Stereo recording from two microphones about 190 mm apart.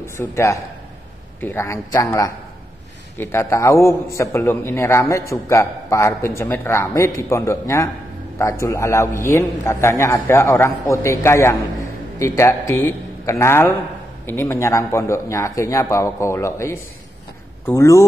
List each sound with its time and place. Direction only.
0.0 s a man's voice: 15° left (ahead or behind)
3.2 s a man's voice: 15° left (ahead or behind)